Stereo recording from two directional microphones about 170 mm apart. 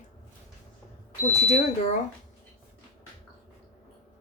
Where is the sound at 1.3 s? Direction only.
40° left (ahead or behind).